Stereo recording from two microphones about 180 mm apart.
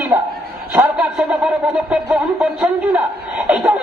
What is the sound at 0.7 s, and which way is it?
Speech, 5° right (ahead or behind).